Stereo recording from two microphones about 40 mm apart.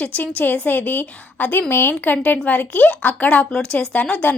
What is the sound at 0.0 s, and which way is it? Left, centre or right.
A woman's voice, left.